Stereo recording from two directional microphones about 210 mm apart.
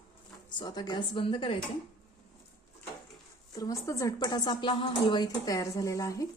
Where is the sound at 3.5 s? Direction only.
15° left (ahead or behind).